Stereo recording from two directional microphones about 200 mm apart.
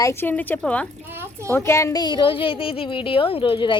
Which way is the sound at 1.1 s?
10° right (ahead or behind).